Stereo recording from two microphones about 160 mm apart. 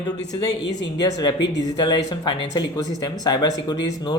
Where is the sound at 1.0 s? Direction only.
25° left (ahead or behind).